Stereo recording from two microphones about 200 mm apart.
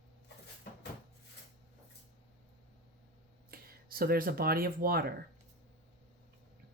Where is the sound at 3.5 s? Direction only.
50° right (ahead or behind).